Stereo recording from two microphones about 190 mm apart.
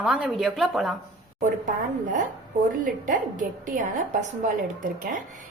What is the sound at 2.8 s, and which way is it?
A woman's voice, 45° right (ahead or behind).